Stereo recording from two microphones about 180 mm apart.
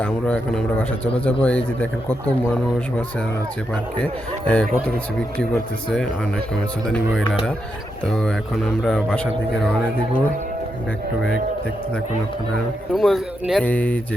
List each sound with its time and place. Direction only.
0.0 s speech: 5° left (ahead or behind)
3.9 s speech: 5° left (ahead or behind)
8.1 s speech: 5° left (ahead or behind)
12.9 s speech: centre (ahead or behind)